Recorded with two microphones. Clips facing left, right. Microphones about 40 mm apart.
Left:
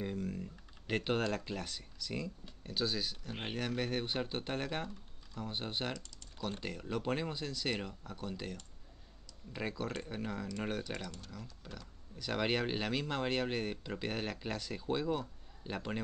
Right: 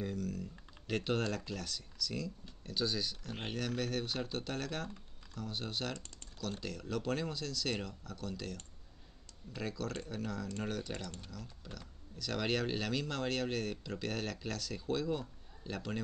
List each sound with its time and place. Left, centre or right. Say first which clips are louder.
0.0 s typing: even; left
2.7 s a man's voice: even; centre